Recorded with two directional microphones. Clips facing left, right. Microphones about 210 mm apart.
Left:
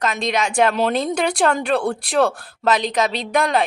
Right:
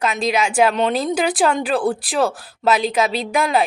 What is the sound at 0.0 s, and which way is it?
A woman's voice, 5° right (ahead or behind).